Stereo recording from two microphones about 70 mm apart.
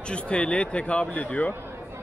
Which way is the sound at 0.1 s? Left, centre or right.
Centre.